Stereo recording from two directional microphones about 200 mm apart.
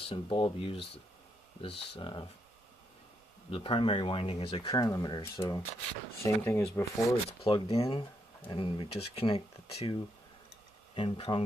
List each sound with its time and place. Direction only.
0.0 s speech: 25° left (ahead or behind)
3.4 s speech: 25° left (ahead or behind)
7.4 s speech: 30° left (ahead or behind)
11.0 s speech: 25° left (ahead or behind)